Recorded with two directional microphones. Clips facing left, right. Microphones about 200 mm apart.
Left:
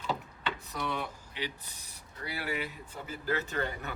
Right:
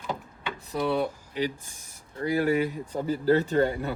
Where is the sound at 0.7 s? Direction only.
30° right (ahead or behind).